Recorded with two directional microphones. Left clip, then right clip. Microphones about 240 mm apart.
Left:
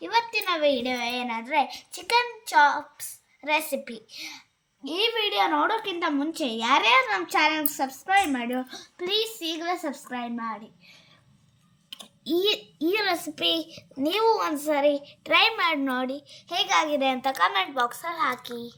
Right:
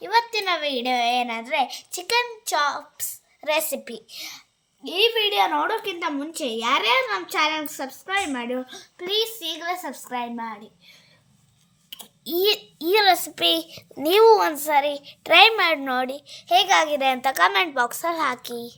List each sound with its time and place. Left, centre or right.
0.0 s a child's voice: right
11.9 s clicking: right
13.0 s a child's voice: right